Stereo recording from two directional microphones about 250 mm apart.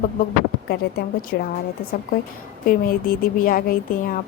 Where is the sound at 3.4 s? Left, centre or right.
Left.